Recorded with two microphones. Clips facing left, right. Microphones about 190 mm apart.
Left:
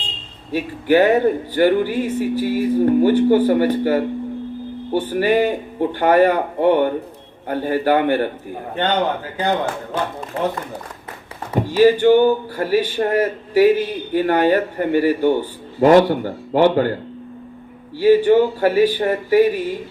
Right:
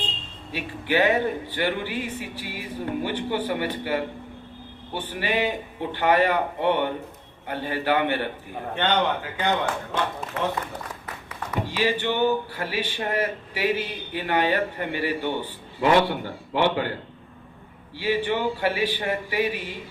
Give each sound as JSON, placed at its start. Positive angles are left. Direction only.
{"t": 0.5, "sound": "speech", "side_deg": 45}
{"t": 5.1, "sound": "a man's voice", "side_deg": 45}
{"t": 11.5, "sound": "speech", "side_deg": 45}